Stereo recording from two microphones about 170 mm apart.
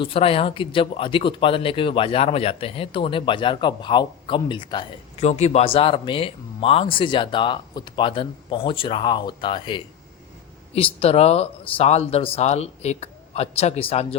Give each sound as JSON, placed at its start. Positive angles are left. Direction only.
{"t": 0.0, "sound": "speech", "side_deg": 35}
{"t": 5.2, "sound": "speech", "side_deg": 40}